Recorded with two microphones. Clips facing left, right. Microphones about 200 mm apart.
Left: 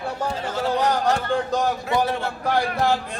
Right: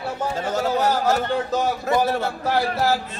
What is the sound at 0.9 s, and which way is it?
A man's voice, 5° right (ahead or behind).